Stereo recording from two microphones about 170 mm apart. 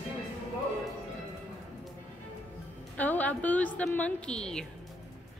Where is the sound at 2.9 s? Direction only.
10° left (ahead or behind).